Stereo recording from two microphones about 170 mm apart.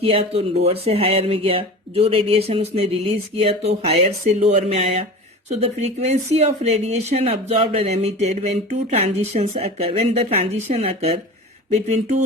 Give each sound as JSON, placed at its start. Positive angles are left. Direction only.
{"t": 0.0, "sound": "speech", "side_deg": -35}